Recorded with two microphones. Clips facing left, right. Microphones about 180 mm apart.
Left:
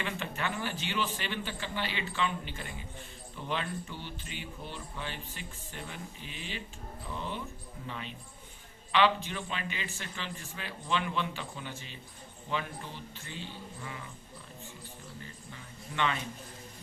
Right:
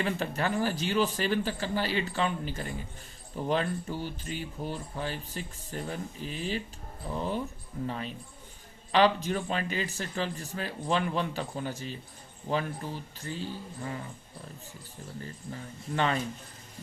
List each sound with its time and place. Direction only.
0.0 s speech: 40° right (ahead or behind)
15.2 s speech: 40° right (ahead or behind)